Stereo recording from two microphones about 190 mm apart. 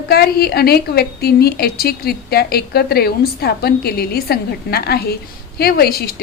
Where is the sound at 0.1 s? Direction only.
55° left (ahead or behind).